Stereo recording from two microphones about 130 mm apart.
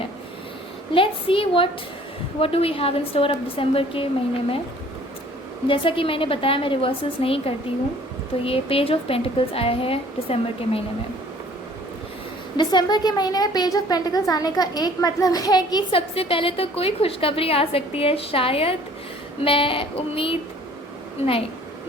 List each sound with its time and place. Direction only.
0.9 s a woman's voice: 45° left (ahead or behind)
5.6 s a woman's voice: 40° left (ahead or behind)
12.5 s a woman's voice: 35° left (ahead or behind)